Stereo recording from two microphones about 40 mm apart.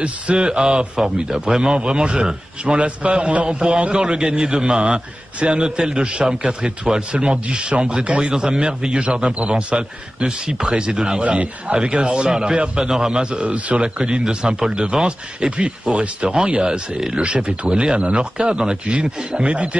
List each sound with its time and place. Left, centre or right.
0.0 s speech: right
8.0 s a man's voice: right
8.3 s speech: centre
11.2 s speech: right